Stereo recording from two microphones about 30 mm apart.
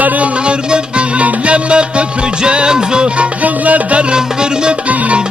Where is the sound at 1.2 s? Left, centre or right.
Right.